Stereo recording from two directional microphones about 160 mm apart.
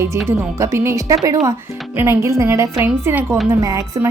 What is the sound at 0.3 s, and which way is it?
A woman's voice, 15° right (ahead or behind).